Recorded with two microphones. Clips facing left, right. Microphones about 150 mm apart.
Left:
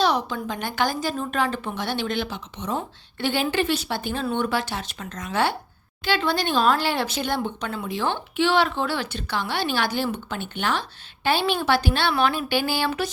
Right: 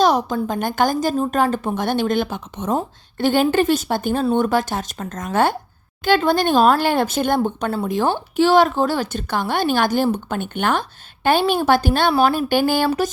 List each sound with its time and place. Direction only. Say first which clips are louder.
0.0 s a woman's voice: right 6 dB; 45° right (ahead or behind)